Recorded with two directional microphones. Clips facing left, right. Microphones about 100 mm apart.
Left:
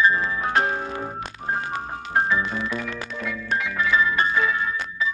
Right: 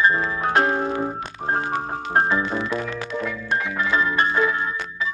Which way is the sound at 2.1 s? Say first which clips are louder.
Right 2 dB; 35° right (ahead or behind).